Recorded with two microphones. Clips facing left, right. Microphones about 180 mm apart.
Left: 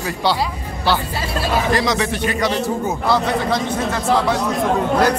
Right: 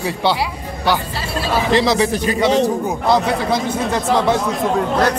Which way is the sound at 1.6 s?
30° right (ahead or behind).